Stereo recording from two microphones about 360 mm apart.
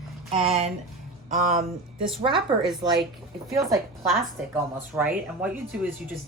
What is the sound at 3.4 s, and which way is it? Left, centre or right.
Speech, centre.